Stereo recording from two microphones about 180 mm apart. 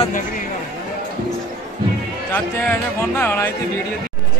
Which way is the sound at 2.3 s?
10° left (ahead or behind).